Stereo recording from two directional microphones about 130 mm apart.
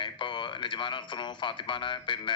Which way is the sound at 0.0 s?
40° left (ahead or behind).